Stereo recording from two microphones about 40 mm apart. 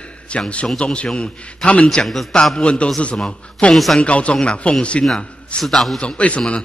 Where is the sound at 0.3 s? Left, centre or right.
Left.